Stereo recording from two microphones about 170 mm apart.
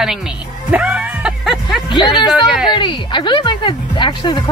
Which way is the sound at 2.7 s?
30° left (ahead or behind).